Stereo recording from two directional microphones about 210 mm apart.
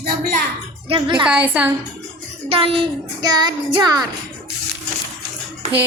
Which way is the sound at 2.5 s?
25° right (ahead or behind).